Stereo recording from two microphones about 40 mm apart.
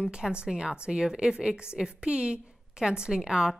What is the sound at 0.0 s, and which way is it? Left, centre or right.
A woman's voice, right.